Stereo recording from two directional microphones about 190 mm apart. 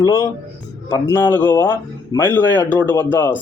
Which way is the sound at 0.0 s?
20° left (ahead or behind).